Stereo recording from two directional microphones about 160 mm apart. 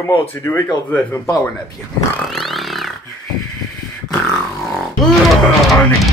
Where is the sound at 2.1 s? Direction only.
Centre (ahead or behind).